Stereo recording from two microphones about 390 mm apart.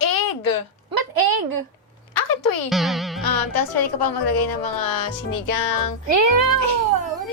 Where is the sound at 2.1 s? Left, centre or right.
Left.